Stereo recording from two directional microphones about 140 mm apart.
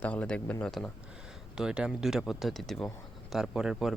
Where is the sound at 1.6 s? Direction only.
5° right (ahead or behind).